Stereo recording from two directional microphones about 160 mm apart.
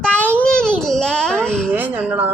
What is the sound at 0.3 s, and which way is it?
Baby cry, 5° left (ahead or behind).